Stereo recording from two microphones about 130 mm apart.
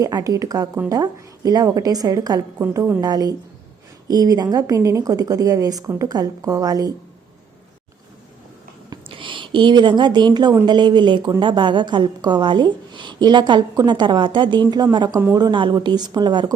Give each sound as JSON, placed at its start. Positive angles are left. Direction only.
{"t": 0.0, "sound": "a woman's voice", "side_deg": -25}
{"t": 9.0, "sound": "a woman's voice", "side_deg": -40}